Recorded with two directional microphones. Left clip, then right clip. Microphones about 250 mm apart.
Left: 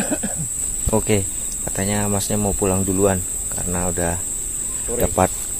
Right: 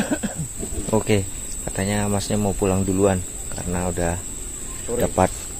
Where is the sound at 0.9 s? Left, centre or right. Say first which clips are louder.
Left 1 dB; centre.